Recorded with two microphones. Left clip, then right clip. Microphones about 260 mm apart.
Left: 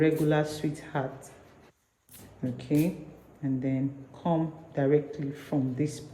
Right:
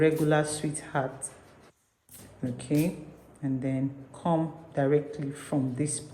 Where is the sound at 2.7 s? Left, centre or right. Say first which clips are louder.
Left 1 dB; right.